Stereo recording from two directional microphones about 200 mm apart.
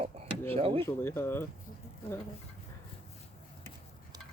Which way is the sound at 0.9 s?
10° left (ahead or behind).